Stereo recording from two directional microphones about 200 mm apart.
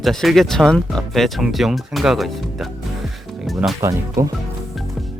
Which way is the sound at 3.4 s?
Centre (ahead or behind).